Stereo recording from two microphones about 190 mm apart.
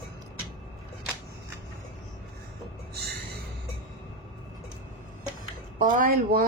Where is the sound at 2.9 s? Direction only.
55° right (ahead or behind).